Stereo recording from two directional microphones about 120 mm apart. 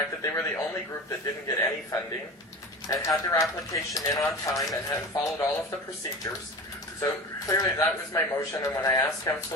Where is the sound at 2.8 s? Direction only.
30° left (ahead or behind).